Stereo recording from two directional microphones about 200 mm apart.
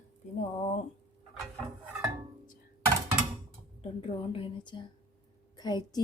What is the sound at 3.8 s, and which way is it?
A woman's voice, 25° left (ahead or behind).